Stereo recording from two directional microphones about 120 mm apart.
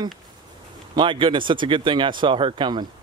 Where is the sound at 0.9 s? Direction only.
45° right (ahead or behind).